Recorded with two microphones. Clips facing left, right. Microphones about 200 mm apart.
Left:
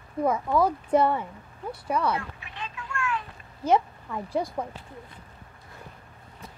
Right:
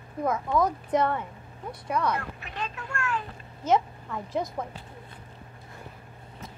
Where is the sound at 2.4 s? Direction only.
45° right (ahead or behind).